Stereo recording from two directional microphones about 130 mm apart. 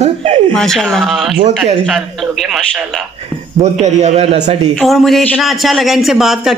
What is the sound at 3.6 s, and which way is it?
A man's voice, 60° right (ahead or behind).